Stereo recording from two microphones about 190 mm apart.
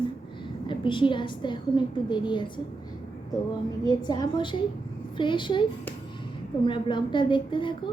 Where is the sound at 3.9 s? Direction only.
20° left (ahead or behind).